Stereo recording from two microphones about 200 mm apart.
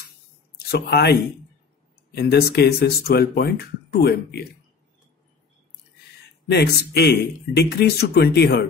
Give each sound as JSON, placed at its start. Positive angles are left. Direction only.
{"t": 0.7, "sound": "speech", "side_deg": 55}
{"t": 2.1, "sound": "speech", "side_deg": 55}
{"t": 6.5, "sound": "speech", "side_deg": 55}